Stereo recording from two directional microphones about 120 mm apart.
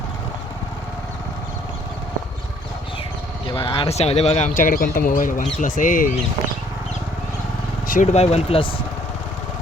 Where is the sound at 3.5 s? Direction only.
45° left (ahead or behind).